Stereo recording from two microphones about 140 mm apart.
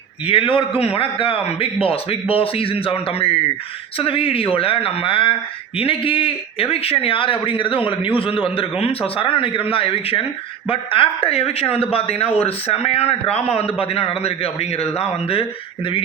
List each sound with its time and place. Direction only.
0.3 s speech: 40° left (ahead or behind)